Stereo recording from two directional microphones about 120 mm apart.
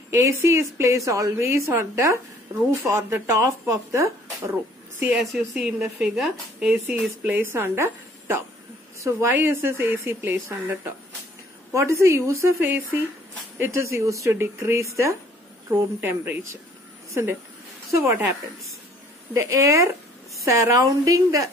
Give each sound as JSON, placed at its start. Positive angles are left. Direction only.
{"t": 0.1, "sound": "a woman's voice", "side_deg": -25}
{"t": 5.0, "sound": "a woman's voice", "side_deg": -5}
{"t": 19.3, "sound": "a woman's voice", "side_deg": -25}